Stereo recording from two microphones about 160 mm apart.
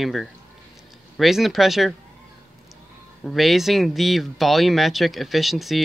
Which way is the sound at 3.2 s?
Centre (ahead or behind).